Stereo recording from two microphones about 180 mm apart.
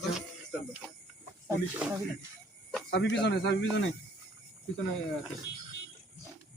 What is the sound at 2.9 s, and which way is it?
Speech, 75° left (ahead or behind).